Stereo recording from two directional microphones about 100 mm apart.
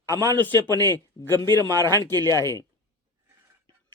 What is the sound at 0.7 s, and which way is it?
A man's voice, 30° left (ahead or behind).